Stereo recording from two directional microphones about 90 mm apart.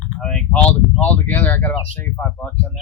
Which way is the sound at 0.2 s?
10° left (ahead or behind).